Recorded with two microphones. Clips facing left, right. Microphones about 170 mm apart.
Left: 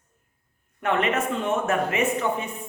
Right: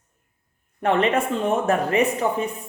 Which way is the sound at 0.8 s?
30° right (ahead or behind).